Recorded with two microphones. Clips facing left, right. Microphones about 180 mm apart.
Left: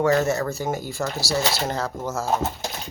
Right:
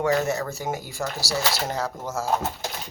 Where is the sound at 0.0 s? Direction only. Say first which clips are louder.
Left 3 dB; 15° right (ahead or behind).